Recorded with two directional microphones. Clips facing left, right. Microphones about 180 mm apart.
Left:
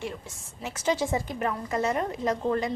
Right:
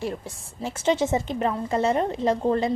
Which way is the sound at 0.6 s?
25° right (ahead or behind).